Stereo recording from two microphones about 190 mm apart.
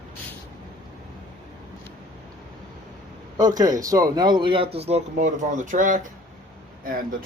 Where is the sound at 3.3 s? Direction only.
20° right (ahead or behind).